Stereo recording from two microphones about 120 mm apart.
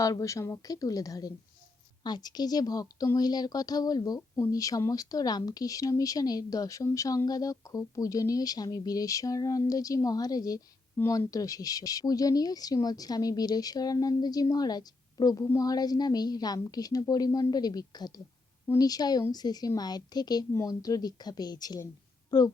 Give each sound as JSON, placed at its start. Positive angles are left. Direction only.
{"t": 0.0, "sound": "a woman's voice", "side_deg": 30}
{"t": 10.9, "sound": "speech", "side_deg": 20}